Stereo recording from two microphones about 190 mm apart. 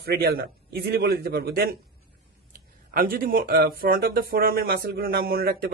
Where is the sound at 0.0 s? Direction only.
55° right (ahead or behind).